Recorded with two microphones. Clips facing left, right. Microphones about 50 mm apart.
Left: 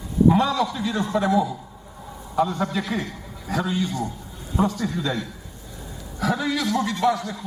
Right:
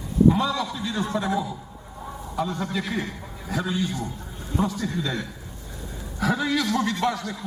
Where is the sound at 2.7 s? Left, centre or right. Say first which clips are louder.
Left 2 dB; centre.